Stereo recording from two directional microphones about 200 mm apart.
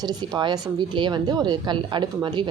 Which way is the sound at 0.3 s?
20° right (ahead or behind).